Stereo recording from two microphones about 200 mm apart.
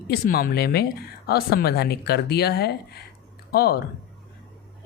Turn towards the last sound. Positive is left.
turn(degrees=50)  # may be behind; listen again after turning